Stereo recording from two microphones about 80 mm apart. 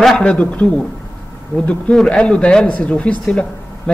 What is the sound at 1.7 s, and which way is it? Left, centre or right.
Speech, centre.